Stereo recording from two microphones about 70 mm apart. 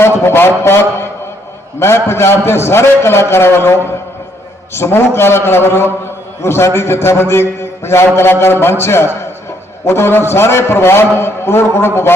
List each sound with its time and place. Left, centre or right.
0.0 s a man's voice: left